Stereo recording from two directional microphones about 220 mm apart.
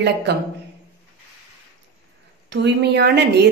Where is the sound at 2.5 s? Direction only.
50° right (ahead or behind).